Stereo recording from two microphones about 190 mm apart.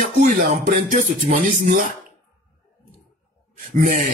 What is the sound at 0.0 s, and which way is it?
A man's voice, 45° right (ahead or behind).